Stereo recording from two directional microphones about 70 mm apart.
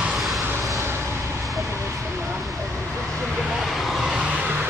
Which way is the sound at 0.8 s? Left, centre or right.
Right.